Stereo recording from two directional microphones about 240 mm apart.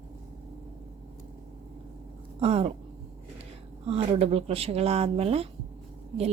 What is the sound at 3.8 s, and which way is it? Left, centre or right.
A woman's voice, right.